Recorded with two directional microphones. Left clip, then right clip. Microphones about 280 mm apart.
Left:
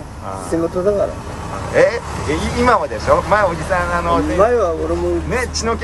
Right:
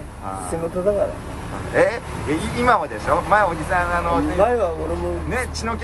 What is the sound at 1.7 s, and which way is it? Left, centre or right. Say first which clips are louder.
Speech: left 4 dB; centre.